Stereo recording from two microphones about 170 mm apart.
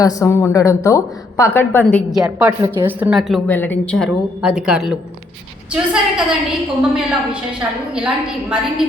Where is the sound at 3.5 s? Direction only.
10° left (ahead or behind).